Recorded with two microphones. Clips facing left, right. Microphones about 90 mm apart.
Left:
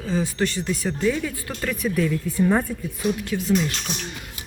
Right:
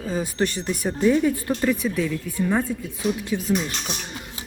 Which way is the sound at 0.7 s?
20° right (ahead or behind).